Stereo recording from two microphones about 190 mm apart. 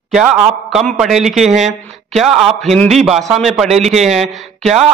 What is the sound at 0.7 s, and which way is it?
A man's voice, centre (ahead or behind).